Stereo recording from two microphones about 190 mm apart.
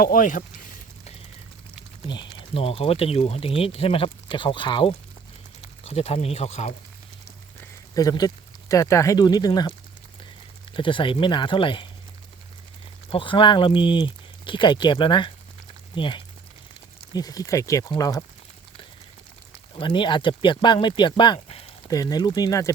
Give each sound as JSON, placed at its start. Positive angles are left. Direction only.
{"t": 0.0, "sound": "a sound", "side_deg": 45}
{"t": 2.0, "sound": "speech", "side_deg": 25}
{"t": 7.6, "sound": "a sound", "side_deg": 20}
{"t": 8.7, "sound": "speech", "side_deg": 15}
{"t": 10.8, "sound": "speech", "side_deg": 25}
{"t": 13.1, "sound": "speech", "side_deg": 25}
{"t": 19.8, "sound": "speech", "side_deg": 25}
{"t": 21.8, "sound": "speech", "side_deg": 20}